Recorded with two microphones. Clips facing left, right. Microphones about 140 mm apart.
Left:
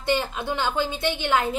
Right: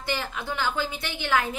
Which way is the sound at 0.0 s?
20° left (ahead or behind).